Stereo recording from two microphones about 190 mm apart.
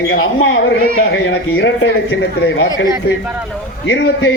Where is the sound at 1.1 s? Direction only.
65° left (ahead or behind).